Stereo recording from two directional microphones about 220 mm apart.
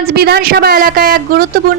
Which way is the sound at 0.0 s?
45° right (ahead or behind).